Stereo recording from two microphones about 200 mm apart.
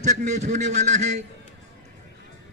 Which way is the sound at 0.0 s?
35° right (ahead or behind).